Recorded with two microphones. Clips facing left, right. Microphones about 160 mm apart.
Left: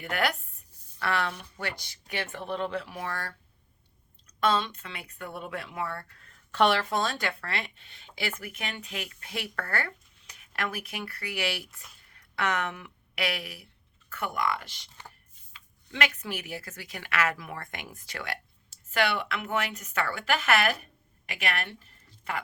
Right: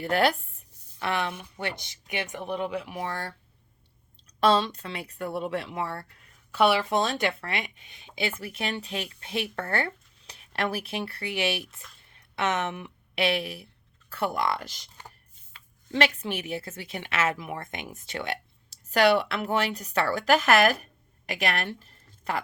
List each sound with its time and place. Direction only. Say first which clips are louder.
0.0 s a woman's voice: right 6 dB; 30° right (ahead or behind)
4.4 s a woman's voice: right 4 dB; 35° right (ahead or behind)
6.1 s a sound: right 1 dB; 10° right (ahead or behind)
6.9 s a woman's voice: right 4 dB; 20° right (ahead or behind); by 14.8 s 40° right (ahead or behind)
15.9 s speech: right 5 dB; 30° right (ahead or behind)
18.9 s a woman's voice: right 7 dB; 40° right (ahead or behind)